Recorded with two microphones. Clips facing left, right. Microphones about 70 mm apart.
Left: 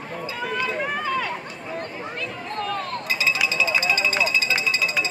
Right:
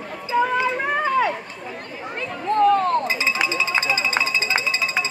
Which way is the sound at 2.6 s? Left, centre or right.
Right.